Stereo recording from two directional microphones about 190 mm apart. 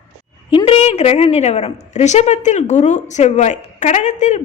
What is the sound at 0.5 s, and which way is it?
A woman's voice, 30° left (ahead or behind).